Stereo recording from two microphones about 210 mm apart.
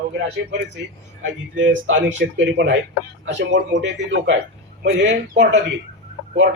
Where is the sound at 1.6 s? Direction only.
60° right (ahead or behind).